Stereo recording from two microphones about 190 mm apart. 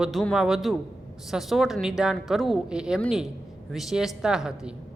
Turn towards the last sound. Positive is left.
turn(degrees=-5)  # may be behind; listen again after turning